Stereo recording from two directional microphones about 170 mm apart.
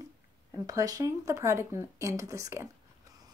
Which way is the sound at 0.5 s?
20° right (ahead or behind).